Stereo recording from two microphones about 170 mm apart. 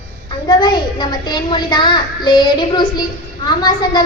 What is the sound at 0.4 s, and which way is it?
A woman's voice, 25° left (ahead or behind).